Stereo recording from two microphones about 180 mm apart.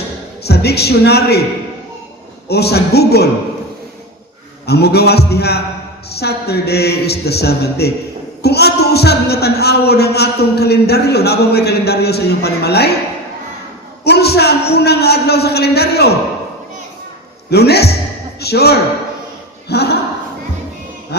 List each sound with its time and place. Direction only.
0.4 s speech: 65° left (ahead or behind)
2.5 s speech: 65° left (ahead or behind)
4.6 s speech: 65° left (ahead or behind)
14.0 s speech: 65° left (ahead or behind)
17.5 s speech: 65° left (ahead or behind)
19.6 s a sound: 65° left (ahead or behind)
21.1 s music: 65° left (ahead or behind)